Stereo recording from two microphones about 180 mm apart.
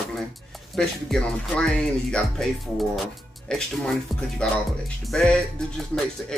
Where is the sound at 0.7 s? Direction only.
5° left (ahead or behind).